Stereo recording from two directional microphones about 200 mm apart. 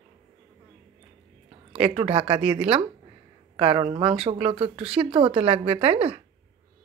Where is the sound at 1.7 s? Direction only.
30° right (ahead or behind).